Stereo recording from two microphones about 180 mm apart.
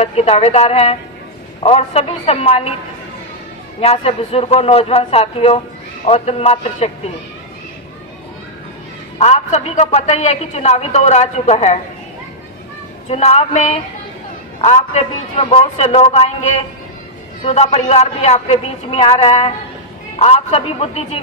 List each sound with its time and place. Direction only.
0.0 s a man's voice: 35° left (ahead or behind)
3.8 s a man's voice: 35° left (ahead or behind)
9.2 s a man's voice: 40° left (ahead or behind)
13.1 s a man's voice: 35° left (ahead or behind)
17.5 s a man's voice: 35° left (ahead or behind)